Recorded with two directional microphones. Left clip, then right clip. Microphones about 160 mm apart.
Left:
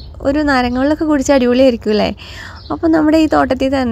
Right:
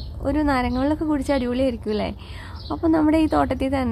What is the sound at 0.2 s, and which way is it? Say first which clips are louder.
A woman's voice: left 8 dB; 35° left (ahead or behind).